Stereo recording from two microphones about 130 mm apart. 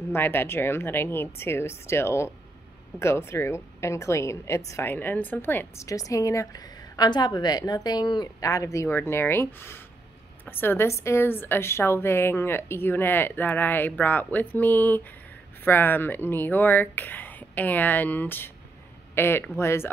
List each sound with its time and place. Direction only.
0.1 s a woman's voice: 15° left (ahead or behind)